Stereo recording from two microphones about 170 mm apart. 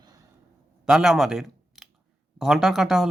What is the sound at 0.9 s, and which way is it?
Speech, centre (ahead or behind).